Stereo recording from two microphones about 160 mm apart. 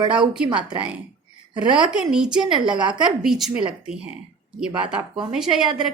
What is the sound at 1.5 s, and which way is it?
Speech, 30° right (ahead or behind).